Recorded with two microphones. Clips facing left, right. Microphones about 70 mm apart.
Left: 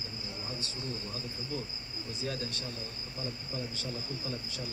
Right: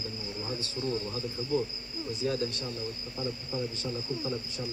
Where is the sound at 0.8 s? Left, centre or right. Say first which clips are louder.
Right 10 dB; right.